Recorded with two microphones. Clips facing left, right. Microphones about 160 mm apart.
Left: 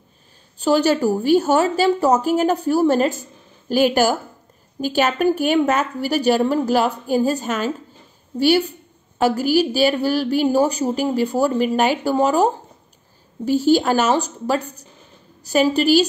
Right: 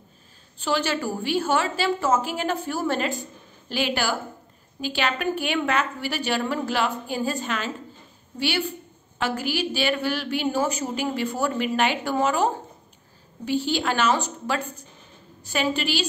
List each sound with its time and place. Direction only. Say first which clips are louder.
0.6 s a woman's voice: left 9 dB; 40° left (ahead or behind)
13.5 s a woman's voice: left 9 dB; 40° left (ahead or behind)